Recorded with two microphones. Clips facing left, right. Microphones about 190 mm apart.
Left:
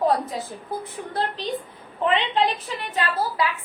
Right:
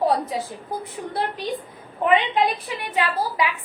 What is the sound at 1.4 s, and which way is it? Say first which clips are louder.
A woman's voice: even; 10° right (ahead or behind).